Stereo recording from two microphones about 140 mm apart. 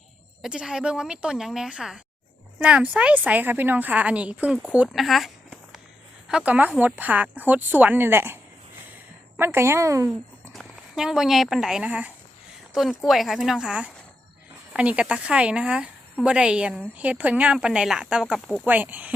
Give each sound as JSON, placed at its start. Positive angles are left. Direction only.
{"t": 0.4, "sound": "a woman's voice", "side_deg": -5}
{"t": 9.4, "sound": "a woman's voice", "side_deg": -20}
{"t": 10.5, "sound": "a woman's voice", "side_deg": 0}
{"t": 18.6, "sound": "a woman's voice", "side_deg": -10}